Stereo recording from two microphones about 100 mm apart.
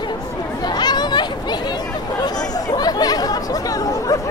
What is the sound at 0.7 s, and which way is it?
Chatter, 45° left (ahead or behind).